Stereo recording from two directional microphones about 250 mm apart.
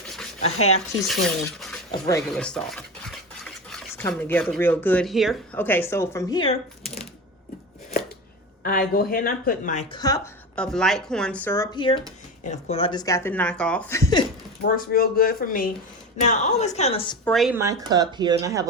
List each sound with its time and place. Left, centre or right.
0.4 s a woman's voice: left
1.9 s speech: centre
2.3 s stir: centre
8.6 s speech: left
9.9 s speech: centre
10.5 s speech: centre
14.6 s a woman's voice: left
17.2 s speech: centre
17.6 s speech: centre